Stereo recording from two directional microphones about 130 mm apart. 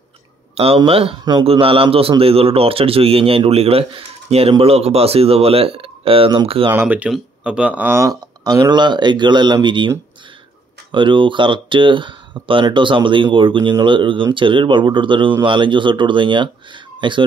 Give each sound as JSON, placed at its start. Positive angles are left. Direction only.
{"t": 0.7, "sound": "a man's voice", "side_deg": -45}
{"t": 6.7, "sound": "speech", "side_deg": -15}
{"t": 10.9, "sound": "speech", "side_deg": -40}